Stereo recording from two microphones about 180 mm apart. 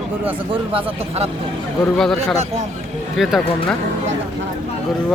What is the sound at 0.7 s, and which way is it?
Speech, 35° right (ahead or behind).